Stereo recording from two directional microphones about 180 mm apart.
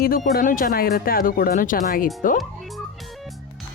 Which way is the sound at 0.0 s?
50° left (ahead or behind).